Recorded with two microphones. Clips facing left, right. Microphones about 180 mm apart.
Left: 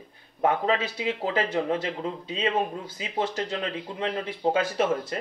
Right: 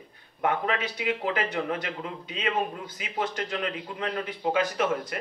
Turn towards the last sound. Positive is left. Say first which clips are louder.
# left 2 dB
turn(degrees=30)  # may be behind; listen again after turning